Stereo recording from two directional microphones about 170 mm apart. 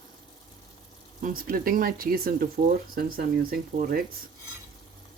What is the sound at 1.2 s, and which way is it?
Speech, 55° right (ahead or behind).